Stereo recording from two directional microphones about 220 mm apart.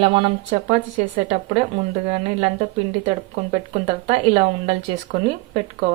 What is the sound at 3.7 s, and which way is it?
Speech, 30° right (ahead or behind).